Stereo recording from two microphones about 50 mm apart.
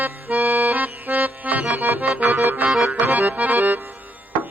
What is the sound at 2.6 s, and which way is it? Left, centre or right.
Accordion, centre.